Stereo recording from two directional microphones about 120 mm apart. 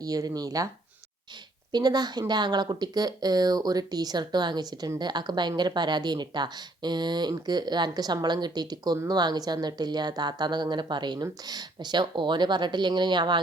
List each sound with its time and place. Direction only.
0.0 s a woman's voice: 30° right (ahead or behind)
1.7 s a woman's voice: 35° right (ahead or behind)